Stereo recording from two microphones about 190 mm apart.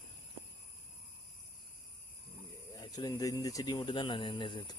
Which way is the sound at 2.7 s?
20° left (ahead or behind).